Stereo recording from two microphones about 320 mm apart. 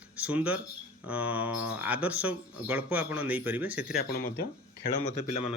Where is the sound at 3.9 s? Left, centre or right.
Left.